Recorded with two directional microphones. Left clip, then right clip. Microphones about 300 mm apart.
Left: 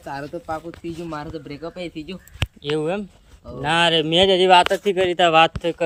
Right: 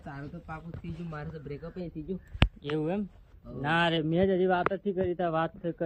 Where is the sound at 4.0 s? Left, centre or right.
Centre.